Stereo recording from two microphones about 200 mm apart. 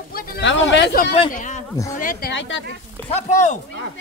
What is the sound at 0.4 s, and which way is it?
Speech, 65° left (ahead or behind).